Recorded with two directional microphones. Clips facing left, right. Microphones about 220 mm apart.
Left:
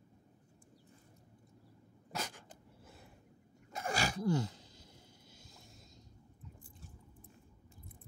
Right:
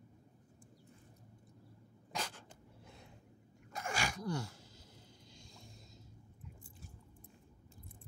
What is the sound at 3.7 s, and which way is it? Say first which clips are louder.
Sneeze: left 3 dB; 35° left (ahead or behind).